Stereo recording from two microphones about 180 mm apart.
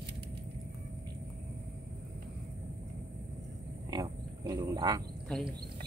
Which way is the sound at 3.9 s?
20° right (ahead or behind).